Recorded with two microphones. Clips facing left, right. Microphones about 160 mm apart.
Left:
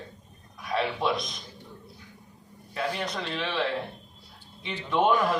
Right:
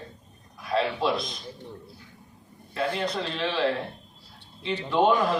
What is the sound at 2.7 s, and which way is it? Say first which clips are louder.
Speech: right 3 dB; 30° right (ahead or behind).